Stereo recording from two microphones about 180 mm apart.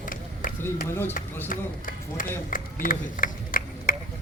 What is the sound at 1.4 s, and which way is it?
Speech, 50° left (ahead or behind).